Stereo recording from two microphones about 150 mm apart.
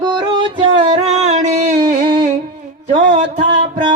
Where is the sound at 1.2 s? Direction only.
50° right (ahead or behind).